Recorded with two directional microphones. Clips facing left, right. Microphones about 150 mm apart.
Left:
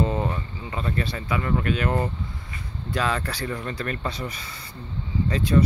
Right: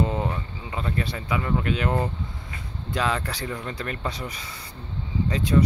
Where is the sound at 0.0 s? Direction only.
10° right (ahead or behind).